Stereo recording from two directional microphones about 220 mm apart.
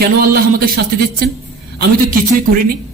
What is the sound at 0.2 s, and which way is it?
A man's voice, 45° right (ahead or behind).